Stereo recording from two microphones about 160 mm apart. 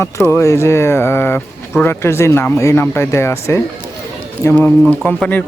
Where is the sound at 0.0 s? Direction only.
15° left (ahead or behind).